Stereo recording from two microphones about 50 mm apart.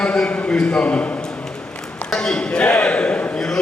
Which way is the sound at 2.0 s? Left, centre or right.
Centre.